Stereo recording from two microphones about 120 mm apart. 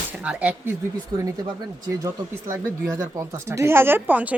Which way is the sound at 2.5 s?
25° right (ahead or behind).